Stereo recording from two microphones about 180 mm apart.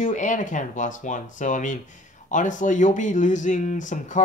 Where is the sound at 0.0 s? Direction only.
45° left (ahead or behind).